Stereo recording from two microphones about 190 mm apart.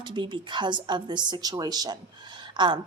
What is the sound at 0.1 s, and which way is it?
A woman's voice, 25° right (ahead or behind).